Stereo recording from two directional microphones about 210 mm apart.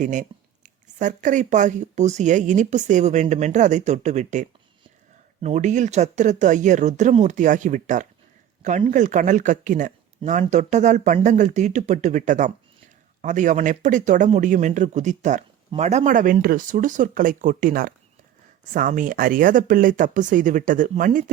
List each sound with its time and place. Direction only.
0.0 s speech: 35° right (ahead or behind)